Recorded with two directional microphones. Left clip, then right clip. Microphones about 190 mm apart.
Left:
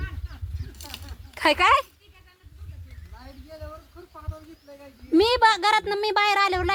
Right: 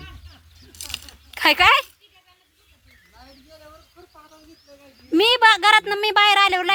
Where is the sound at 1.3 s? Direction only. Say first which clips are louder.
Right 4 dB; 25° right (ahead or behind).